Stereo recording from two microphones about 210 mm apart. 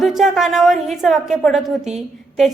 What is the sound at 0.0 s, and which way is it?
A woman's voice, centre (ahead or behind).